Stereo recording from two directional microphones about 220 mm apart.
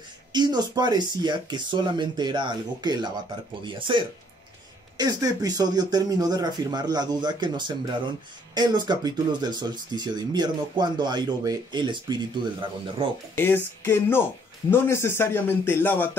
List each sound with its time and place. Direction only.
0.3 s speech: 20° right (ahead or behind)
13.4 s speech: 10° left (ahead or behind)